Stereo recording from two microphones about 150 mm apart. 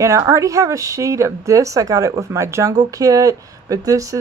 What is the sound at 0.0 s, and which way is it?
Speech, 20° right (ahead or behind).